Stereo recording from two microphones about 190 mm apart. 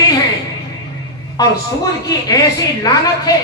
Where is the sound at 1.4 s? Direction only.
20° left (ahead or behind).